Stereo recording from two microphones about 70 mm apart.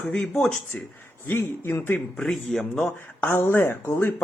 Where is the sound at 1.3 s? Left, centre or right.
Left.